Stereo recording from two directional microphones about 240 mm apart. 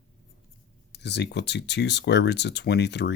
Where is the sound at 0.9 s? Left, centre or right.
Left.